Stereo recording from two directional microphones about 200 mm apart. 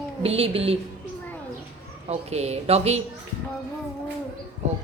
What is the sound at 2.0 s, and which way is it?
Speech, 35° right (ahead or behind).